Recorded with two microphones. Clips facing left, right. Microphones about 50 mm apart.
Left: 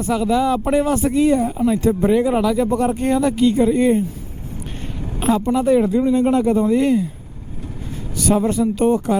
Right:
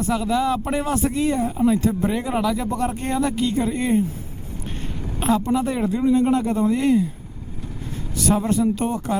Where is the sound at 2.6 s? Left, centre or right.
Left.